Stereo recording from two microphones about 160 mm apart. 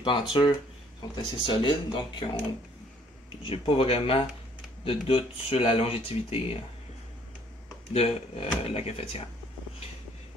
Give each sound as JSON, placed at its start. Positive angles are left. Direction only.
{"t": 0.0, "sound": "speech", "side_deg": 30}
{"t": 7.9, "sound": "speech", "side_deg": 40}